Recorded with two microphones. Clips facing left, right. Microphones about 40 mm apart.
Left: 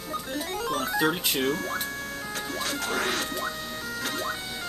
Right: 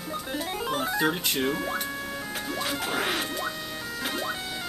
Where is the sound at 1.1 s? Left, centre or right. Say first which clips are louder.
Even; centre.